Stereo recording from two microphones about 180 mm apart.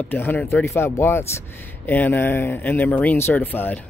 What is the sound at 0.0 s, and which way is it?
Speech, 10° left (ahead or behind).